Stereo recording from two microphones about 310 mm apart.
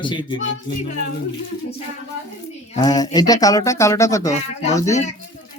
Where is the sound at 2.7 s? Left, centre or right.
Centre.